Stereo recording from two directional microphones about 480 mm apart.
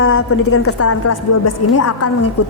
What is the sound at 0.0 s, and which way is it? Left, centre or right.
A woman's voice, left.